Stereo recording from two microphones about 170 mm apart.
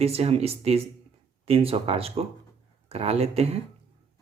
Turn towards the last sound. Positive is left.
turn(degrees=-35)  # may be behind; listen again after turning